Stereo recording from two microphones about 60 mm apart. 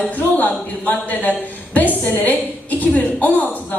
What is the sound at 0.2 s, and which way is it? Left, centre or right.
A woman's voice, left.